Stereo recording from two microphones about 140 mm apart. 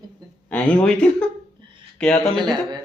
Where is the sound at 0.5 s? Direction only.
10° left (ahead or behind).